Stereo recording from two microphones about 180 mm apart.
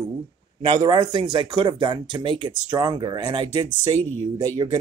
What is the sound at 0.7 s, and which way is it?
Speech, 25° right (ahead or behind).